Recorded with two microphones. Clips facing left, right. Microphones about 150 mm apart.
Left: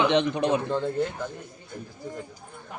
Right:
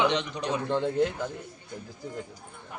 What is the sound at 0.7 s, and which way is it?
Speech, 10° right (ahead or behind).